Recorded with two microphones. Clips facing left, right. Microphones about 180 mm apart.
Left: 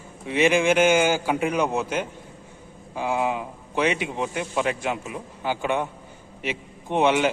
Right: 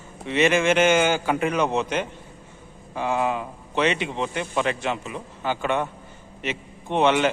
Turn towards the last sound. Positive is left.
turn(degrees=10)  # may be behind; listen again after turning